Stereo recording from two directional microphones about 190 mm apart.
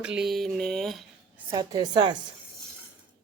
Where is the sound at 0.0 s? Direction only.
5° right (ahead or behind).